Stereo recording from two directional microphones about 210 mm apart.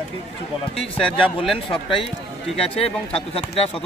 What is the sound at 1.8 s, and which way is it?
Speech, 25° left (ahead or behind).